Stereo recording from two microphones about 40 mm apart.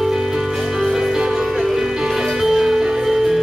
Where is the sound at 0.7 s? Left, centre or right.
Centre.